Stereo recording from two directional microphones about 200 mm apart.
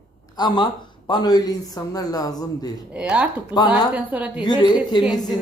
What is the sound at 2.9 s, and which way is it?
Speech, 5° right (ahead or behind).